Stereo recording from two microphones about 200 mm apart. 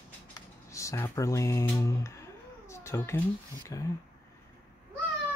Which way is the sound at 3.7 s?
15° left (ahead or behind).